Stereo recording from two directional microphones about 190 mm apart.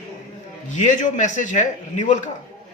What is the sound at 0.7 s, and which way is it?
A man's voice, 40° left (ahead or behind).